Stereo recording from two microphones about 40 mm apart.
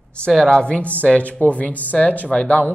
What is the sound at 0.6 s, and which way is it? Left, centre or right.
Speech, left.